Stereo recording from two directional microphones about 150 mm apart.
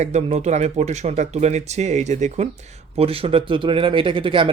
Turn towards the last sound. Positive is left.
turn(degrees=-35)  # may be behind; listen again after turning